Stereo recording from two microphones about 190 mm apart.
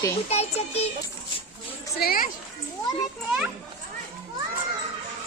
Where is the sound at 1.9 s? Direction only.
50° left (ahead or behind).